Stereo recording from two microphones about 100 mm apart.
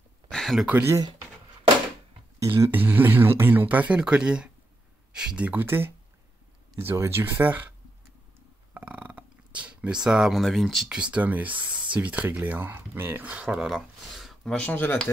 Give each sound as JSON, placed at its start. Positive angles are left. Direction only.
{"t": 0.3, "sound": "a sound", "side_deg": 5}
{"t": 2.4, "sound": "speech", "side_deg": -30}
{"t": 2.7, "sound": "speech", "side_deg": -20}
{"t": 8.7, "sound": "a sound", "side_deg": -15}
{"t": 11.0, "sound": "speech", "side_deg": -15}
{"t": 14.5, "sound": "speech", "side_deg": 15}